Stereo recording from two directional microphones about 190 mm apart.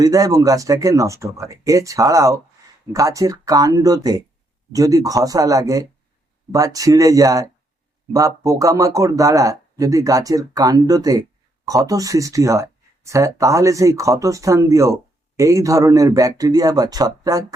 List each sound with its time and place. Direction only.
0.0 s speech: 20° right (ahead or behind)